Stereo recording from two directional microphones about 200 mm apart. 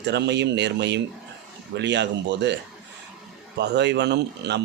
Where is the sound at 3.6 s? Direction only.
60° right (ahead or behind).